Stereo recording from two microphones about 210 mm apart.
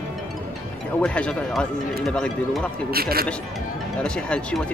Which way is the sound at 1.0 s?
5° left (ahead or behind).